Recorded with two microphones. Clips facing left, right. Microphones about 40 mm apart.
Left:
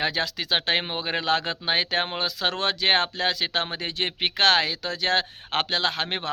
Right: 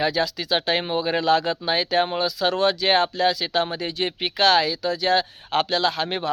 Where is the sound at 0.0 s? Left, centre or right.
Left.